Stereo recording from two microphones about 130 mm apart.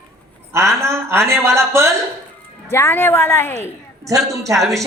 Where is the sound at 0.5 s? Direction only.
20° right (ahead or behind).